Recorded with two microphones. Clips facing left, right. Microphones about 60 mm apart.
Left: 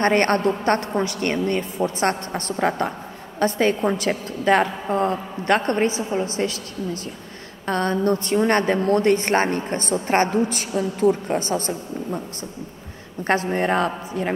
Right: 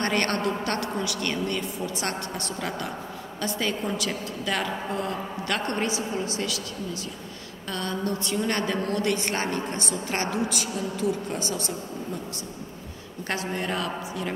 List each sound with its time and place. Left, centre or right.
0.0 s a woman's voice: left
13.3 s a woman's voice: left